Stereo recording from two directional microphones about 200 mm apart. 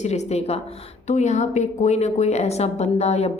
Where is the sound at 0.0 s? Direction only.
35° left (ahead or behind).